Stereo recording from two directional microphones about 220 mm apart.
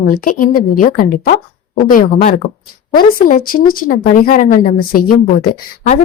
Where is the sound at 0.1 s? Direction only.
40° left (ahead or behind).